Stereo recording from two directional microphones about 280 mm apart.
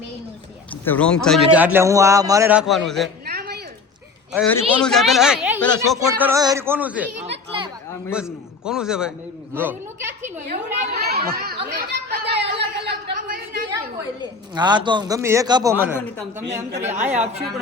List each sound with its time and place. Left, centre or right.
0.7 s speech: centre
3.2 s a sound: right
4.4 s speech: centre
8.1 s speech: centre
10.4 s children playing: right
12.8 s a sound: right
14.2 s a man's voice: centre
16.9 s speech: centre